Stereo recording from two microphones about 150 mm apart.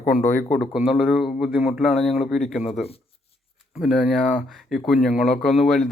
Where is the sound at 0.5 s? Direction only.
Centre (ahead or behind).